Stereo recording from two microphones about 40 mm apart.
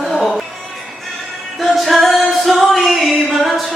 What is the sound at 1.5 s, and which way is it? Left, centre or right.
Music, centre.